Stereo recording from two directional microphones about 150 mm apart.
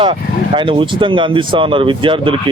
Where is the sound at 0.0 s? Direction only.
35° right (ahead or behind).